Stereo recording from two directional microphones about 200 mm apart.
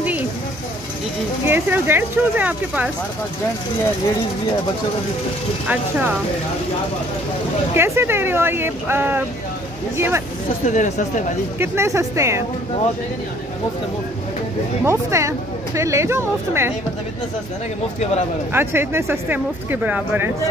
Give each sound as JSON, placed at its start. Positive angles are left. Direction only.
{"t": 1.4, "sound": "speech", "side_deg": -10}
{"t": 5.7, "sound": "speech", "side_deg": -5}
{"t": 7.7, "sound": "speech", "side_deg": -10}
{"t": 10.6, "sound": "speech", "side_deg": 40}
{"t": 11.6, "sound": "speech", "side_deg": -15}
{"t": 14.9, "sound": "speech", "side_deg": -15}
{"t": 18.5, "sound": "speech", "side_deg": -10}